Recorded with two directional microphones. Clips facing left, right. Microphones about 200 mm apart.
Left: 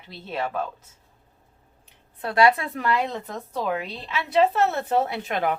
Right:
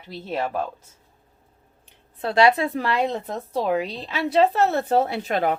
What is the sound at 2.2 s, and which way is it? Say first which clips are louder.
A woman's voice: right 2 dB; 25° right (ahead or behind).